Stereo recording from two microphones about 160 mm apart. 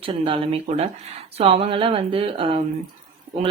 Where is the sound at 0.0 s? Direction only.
35° right (ahead or behind).